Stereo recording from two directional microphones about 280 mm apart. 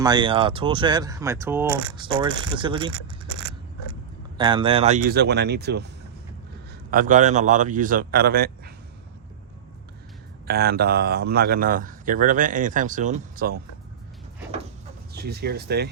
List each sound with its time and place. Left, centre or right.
0.0 s speech: centre
4.4 s speech: centre
5.1 s speech: right
6.9 s a man's voice: right
10.4 s speech: right
15.1 s speech: right